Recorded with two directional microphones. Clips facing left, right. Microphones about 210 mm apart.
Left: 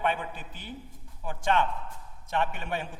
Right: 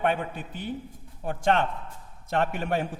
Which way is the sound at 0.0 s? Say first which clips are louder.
Right 4 dB; 45° right (ahead or behind).